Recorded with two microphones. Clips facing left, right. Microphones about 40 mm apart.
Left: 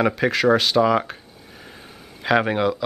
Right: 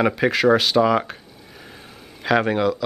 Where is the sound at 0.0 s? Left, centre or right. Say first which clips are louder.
Right 1 dB; centre.